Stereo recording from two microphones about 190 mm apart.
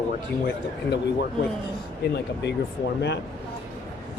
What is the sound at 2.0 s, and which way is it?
Speech, 60° left (ahead or behind).